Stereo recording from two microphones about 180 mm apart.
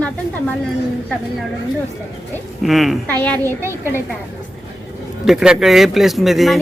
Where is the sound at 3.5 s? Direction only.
15° right (ahead or behind).